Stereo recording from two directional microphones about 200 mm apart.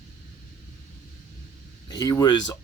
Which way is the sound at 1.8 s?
20° left (ahead or behind).